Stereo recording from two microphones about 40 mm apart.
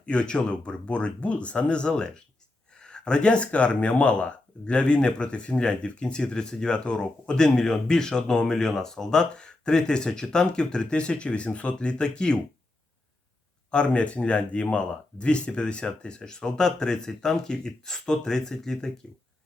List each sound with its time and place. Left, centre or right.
0.0 s speech: left
13.7 s speech: left